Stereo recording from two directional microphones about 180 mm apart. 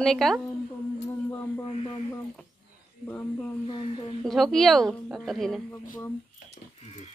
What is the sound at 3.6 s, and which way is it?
Speech, 30° left (ahead or behind).